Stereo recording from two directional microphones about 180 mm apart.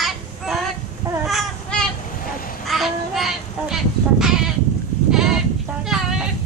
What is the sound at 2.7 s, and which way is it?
Child singing, centre (ahead or behind).